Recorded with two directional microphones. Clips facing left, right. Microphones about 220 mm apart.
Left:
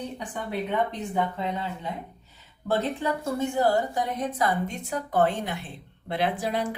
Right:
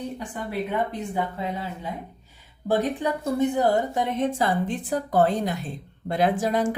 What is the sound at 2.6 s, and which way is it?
A woman's voice, 15° right (ahead or behind).